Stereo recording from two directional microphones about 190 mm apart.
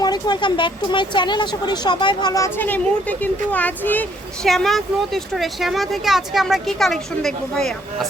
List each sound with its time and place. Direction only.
0.0 s speech: 20° left (ahead or behind); by 8.0 s centre (ahead or behind)